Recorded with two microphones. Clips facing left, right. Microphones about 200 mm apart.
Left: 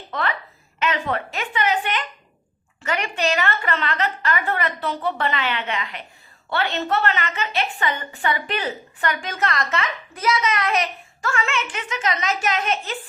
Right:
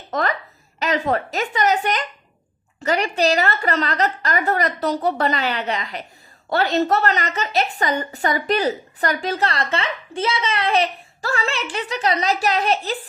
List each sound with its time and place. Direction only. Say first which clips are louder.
0.1 s a woman's voice: right 4 dB; 40° right (ahead or behind)